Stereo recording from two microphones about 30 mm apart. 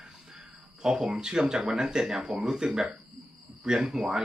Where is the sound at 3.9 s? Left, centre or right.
Centre.